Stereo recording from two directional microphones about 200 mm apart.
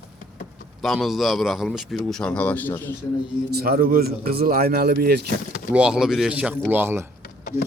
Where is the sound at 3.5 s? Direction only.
50° right (ahead or behind).